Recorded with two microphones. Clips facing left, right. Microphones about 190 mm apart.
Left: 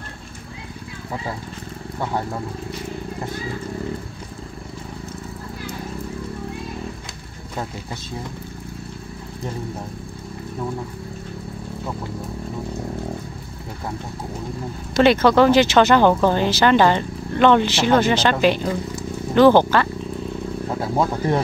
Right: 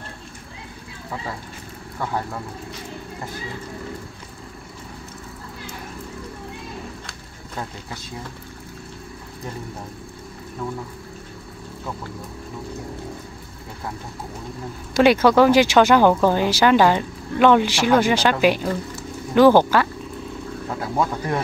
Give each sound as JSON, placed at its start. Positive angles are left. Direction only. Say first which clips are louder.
{"t": 15.0, "sound": "speech", "louder": "even", "side_deg": -10}
{"t": 20.8, "sound": "speech", "louder": "left 2 dB", "side_deg": 25}